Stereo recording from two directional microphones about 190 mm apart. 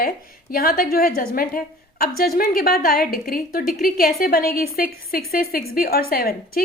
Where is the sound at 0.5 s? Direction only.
50° left (ahead or behind).